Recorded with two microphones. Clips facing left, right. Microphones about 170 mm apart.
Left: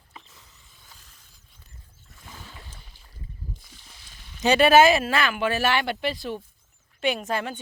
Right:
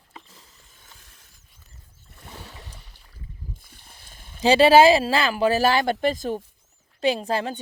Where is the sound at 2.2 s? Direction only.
70° right (ahead or behind).